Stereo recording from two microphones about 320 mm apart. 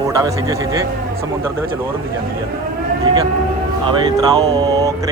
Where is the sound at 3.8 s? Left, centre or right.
Centre.